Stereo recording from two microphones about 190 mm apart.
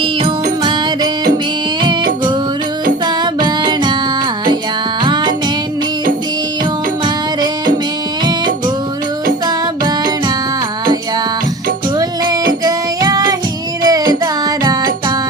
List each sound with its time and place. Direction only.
0.0 s music: 25° right (ahead or behind)
3.4 s music: 25° right (ahead or behind)
5.0 s music: 25° right (ahead or behind)
11.9 s music: 20° right (ahead or behind)